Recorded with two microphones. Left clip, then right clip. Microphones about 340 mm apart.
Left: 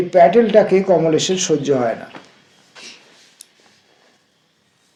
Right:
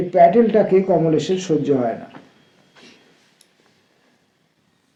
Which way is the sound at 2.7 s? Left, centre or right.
Left.